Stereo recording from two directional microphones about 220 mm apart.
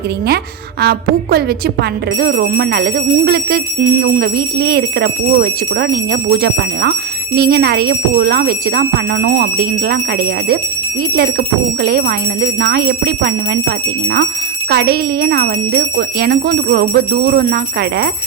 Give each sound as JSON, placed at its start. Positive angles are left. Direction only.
{"t": 0.8, "sound": "speech", "side_deg": -45}